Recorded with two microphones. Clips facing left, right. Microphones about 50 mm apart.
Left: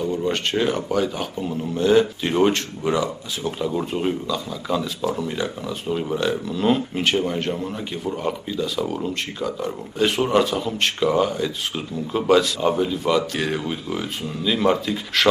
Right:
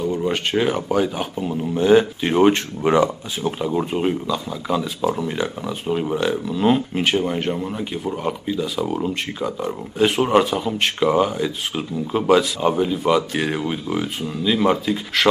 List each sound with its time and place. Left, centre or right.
0.0 s speech: centre
2.8 s speech: right
3.4 s speech: centre